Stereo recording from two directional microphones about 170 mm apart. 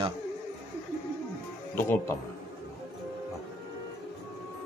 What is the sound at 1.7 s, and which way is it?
Speech, 10° left (ahead or behind).